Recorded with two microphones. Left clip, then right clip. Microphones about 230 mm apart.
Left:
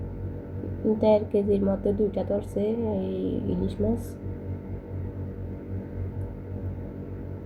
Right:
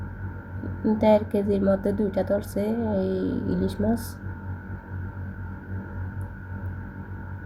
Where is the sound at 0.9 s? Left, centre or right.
Right.